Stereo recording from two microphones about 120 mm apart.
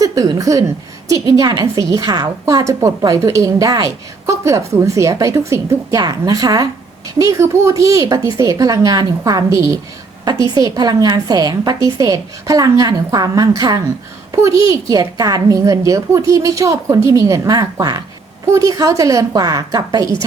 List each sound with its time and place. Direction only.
0.0 s a woman's voice: 30° right (ahead or behind)